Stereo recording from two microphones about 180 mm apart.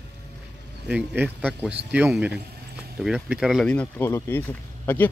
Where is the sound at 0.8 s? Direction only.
10° right (ahead or behind).